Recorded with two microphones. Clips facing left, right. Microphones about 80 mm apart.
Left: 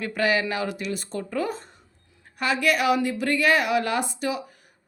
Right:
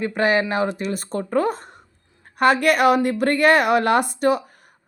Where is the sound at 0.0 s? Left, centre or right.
Right.